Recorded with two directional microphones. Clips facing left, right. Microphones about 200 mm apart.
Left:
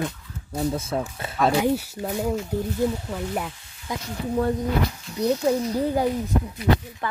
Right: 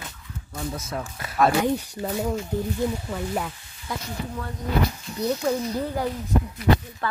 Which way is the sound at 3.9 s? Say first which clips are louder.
Left 1 dB; 20° left (ahead or behind).